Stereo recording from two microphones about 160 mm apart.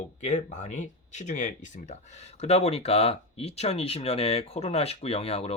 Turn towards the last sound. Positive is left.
turn(degrees=40)  # may be behind; listen again after turning